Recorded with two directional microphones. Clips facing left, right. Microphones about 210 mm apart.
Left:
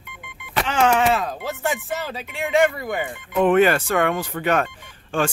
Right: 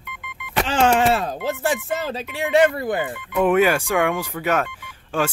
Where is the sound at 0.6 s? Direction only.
30° right (ahead or behind).